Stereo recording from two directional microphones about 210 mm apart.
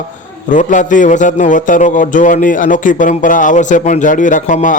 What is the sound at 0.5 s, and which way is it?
A man's voice, 35° left (ahead or behind).